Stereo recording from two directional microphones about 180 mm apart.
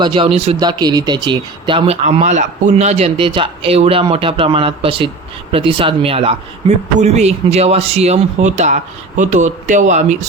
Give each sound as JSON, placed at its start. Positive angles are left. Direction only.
{"t": 0.0, "sound": "speech", "side_deg": -25}
{"t": 0.6, "sound": "speech", "side_deg": -25}